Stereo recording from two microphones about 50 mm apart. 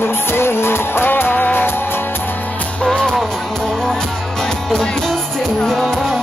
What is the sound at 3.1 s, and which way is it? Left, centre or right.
Music, centre.